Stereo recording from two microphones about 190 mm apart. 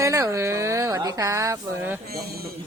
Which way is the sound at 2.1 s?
55° right (ahead or behind).